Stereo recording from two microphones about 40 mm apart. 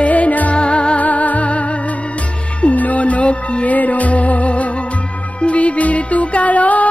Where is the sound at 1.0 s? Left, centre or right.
Left.